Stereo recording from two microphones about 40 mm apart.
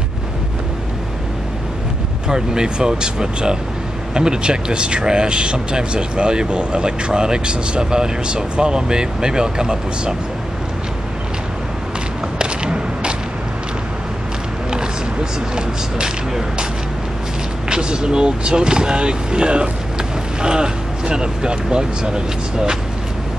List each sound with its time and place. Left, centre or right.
2.2 s speech: centre
12.4 s a sound: right
15.5 s speech: right
17.6 s speech: right